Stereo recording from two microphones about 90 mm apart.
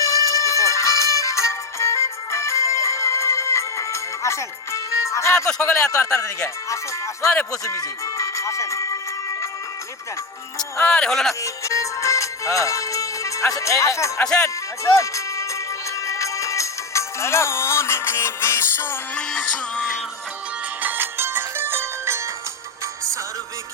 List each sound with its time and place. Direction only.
0.0 s music: 35° left (ahead or behind)
5.6 s speech: 30° left (ahead or behind)
7.3 s speech: 15° left (ahead or behind)
7.6 s speech: 35° left (ahead or behind)
10.8 s speech: 20° left (ahead or behind)
11.0 s music: 5° left (ahead or behind)
11.4 s music: 35° left (ahead or behind)
19.1 s music: 10° left (ahead or behind)
20.8 s music: 20° right (ahead or behind)